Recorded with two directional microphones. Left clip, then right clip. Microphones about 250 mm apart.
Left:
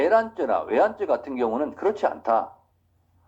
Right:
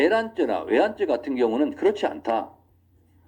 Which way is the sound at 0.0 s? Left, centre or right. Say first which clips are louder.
Left 1 dB; right.